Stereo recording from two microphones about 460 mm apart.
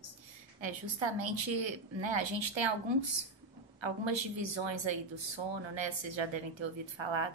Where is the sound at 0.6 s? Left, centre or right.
Right.